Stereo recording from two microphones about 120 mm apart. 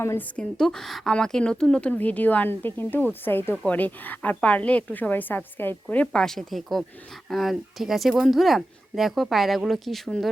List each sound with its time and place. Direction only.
0.0 s speech: 20° left (ahead or behind)
0.3 s speech: 5° left (ahead or behind)